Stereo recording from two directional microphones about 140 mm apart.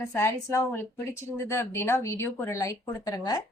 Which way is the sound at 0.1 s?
20° left (ahead or behind).